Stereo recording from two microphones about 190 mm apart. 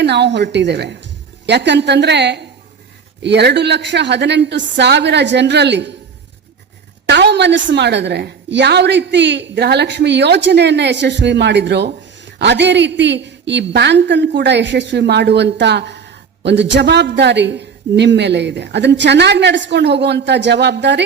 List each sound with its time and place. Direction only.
0.0 s a woman's voice: 65° right (ahead or behind)
7.1 s a woman's voice: 65° right (ahead or behind)